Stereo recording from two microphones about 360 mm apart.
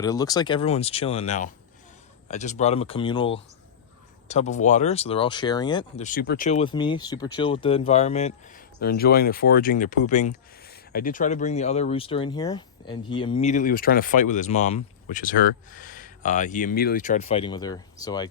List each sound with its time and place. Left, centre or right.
0.0 s speech: centre